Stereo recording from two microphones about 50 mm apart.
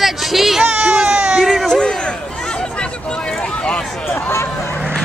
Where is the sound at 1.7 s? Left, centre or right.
Centre.